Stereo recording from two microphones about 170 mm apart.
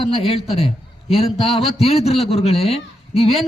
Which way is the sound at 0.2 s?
35° left (ahead or behind).